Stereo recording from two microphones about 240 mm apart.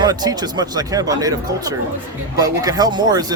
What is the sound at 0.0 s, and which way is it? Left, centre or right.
A man's voice, centre.